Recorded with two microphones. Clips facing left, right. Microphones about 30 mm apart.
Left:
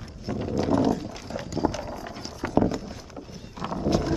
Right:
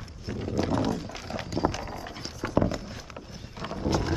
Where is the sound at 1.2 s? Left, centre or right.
Right.